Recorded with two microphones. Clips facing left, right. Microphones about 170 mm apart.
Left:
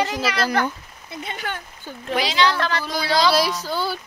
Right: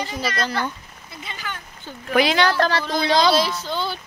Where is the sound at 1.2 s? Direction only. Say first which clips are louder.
Left 4 dB; 60° left (ahead or behind).